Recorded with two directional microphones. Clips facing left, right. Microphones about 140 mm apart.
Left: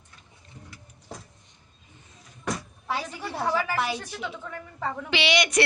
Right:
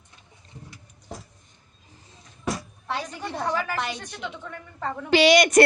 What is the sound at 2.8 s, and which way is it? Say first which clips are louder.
A woman's voice: even; 5° left (ahead or behind).